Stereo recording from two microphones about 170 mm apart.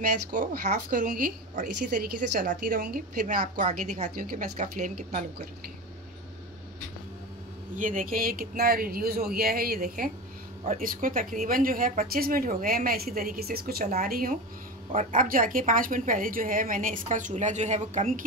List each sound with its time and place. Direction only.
0.3 s a woman's voice: 50° right (ahead or behind)
7.7 s a woman's voice: 50° right (ahead or behind)